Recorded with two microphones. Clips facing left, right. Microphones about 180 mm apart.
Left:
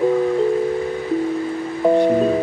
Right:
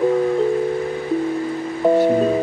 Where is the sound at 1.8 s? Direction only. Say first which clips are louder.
Even; centre (ahead or behind).